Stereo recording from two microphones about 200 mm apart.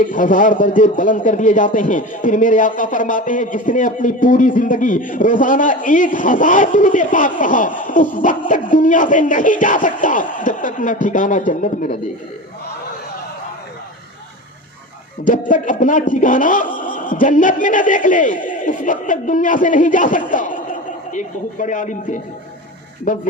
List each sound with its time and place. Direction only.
0.0 s a man's voice: 40° left (ahead or behind)
15.2 s a man's voice: 40° left (ahead or behind)